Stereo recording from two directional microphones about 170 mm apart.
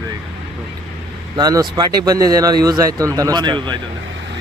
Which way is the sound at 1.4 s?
25° right (ahead or behind).